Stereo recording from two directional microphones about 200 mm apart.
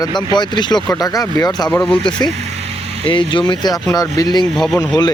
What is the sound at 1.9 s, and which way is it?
Speech, 25° left (ahead or behind).